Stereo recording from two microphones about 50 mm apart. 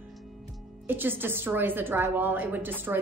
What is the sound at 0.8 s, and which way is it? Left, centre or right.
A woman's voice, right.